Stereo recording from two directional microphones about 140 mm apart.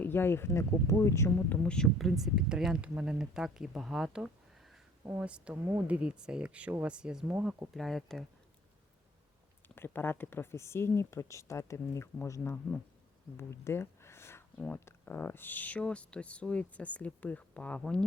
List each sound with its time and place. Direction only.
0.0 s speech: 15° left (ahead or behind)
1.5 s speech: 5° left (ahead or behind)
9.6 s speech: 15° left (ahead or behind)
13.3 s a sound: 20° left (ahead or behind)
14.6 s speech: 10° left (ahead or behind)